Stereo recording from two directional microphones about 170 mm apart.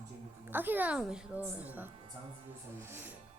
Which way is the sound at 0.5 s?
10° right (ahead or behind).